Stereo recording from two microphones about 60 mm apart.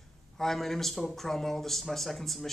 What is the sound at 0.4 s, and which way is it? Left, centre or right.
Speech, centre.